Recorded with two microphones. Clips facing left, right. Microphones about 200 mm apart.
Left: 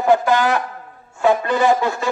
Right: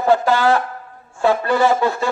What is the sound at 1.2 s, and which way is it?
Speech, 20° left (ahead or behind).